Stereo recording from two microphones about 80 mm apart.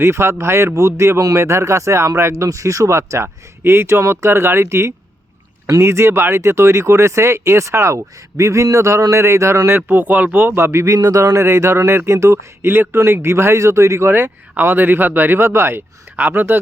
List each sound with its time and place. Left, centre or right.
0.0 s speech: right